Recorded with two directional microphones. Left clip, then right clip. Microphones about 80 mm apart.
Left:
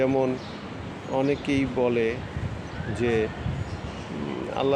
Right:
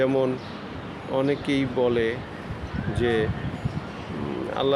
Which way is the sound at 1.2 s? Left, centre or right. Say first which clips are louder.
Even; centre.